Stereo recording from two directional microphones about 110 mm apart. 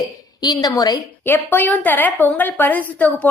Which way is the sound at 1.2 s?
20° left (ahead or behind).